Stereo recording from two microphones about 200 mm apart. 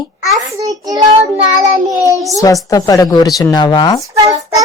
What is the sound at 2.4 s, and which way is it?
Speech, 15° left (ahead or behind).